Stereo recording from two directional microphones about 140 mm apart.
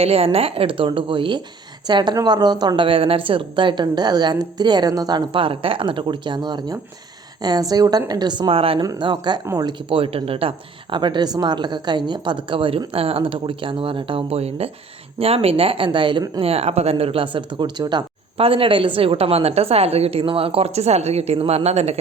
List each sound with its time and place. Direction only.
0.0 s a woman's voice: 45° right (ahead or behind)
8.8 s a woman's voice: 30° right (ahead or behind)
9.9 s a woman's voice: 40° right (ahead or behind)
16.4 s a woman's voice: 45° right (ahead or behind)
18.3 s a woman's voice: 40° right (ahead or behind)